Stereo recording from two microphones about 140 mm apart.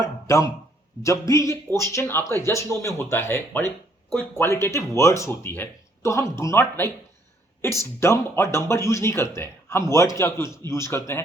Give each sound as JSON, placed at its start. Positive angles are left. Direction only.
{"t": 0.3, "sound": "speech", "side_deg": 20}